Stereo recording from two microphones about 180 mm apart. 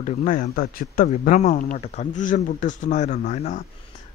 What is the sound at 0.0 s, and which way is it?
A man's voice, 45° left (ahead or behind).